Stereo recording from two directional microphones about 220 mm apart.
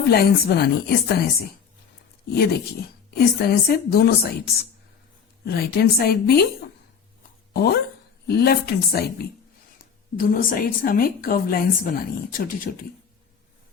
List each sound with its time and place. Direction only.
0.1 s a woman's voice: 45° left (ahead or behind)
5.5 s a woman's voice: 45° left (ahead or behind)
7.5 s a woman's voice: 45° left (ahead or behind)
10.2 s a woman's voice: 40° left (ahead or behind)